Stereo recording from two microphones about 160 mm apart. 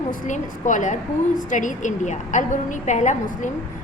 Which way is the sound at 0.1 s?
50° left (ahead or behind).